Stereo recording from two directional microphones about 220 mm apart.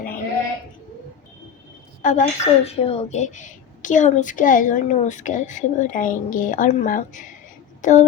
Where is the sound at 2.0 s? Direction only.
30° left (ahead or behind).